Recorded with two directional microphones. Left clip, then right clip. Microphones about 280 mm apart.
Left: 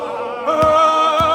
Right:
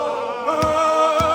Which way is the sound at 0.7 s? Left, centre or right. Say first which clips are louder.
Left 4 dB; centre.